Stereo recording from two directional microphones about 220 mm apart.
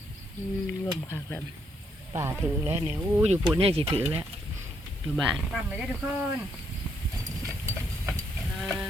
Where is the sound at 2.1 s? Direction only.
10° right (ahead or behind).